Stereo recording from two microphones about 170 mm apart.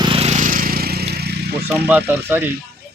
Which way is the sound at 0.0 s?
35° right (ahead or behind).